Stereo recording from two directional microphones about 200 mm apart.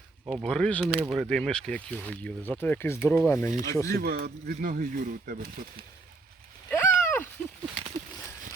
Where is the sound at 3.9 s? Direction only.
50° right (ahead or behind).